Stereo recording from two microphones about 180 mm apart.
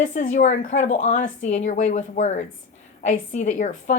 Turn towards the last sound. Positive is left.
turn(degrees=40)  # may be behind; listen again after turning